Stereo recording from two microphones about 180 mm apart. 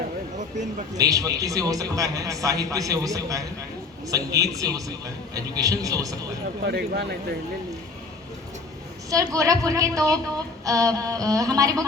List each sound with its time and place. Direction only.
0.3 s a sound: 40° right (ahead or behind)
0.9 s a woman's voice: 20° right (ahead or behind)
6.6 s speech: 65° right (ahead or behind)
9.0 s a woman's voice: 20° right (ahead or behind)